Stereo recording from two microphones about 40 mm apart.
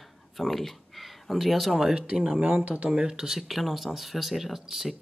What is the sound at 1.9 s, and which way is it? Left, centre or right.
Speech, right.